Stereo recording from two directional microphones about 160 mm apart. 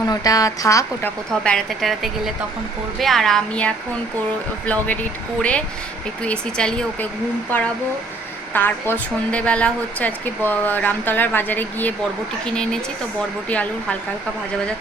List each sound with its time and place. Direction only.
0.0 s speech: 25° left (ahead or behind)
1.3 s a woman's voice: 5° left (ahead or behind)
8.5 s a woman's voice: 10° left (ahead or behind)
13.5 s a woman's voice: 10° left (ahead or behind)